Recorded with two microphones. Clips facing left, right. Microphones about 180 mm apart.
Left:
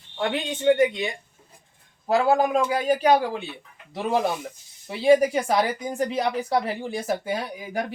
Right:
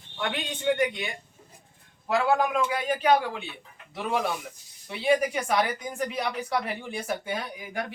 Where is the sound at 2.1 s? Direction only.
35° left (ahead or behind).